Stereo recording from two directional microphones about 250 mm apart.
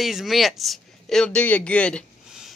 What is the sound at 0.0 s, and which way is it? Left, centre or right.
Speech, centre.